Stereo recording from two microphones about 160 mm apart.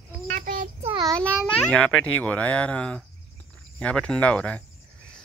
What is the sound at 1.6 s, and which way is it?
A child's voice, 5° left (ahead or behind).